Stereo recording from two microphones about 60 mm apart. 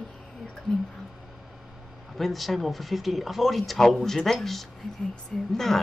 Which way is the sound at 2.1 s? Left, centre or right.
Centre.